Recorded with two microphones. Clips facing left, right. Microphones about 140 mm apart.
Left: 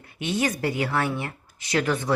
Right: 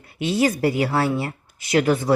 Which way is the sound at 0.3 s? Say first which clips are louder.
Right 6 dB; 30° right (ahead or behind).